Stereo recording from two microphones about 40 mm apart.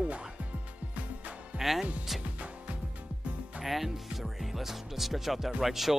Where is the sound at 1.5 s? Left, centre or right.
Right.